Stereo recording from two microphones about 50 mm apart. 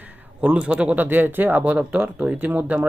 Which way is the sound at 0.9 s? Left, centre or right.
Right.